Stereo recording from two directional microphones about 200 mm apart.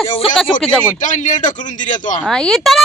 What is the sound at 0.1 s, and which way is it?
Speech, 25° left (ahead or behind).